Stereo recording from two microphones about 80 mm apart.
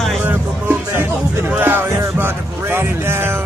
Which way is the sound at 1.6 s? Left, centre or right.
Right.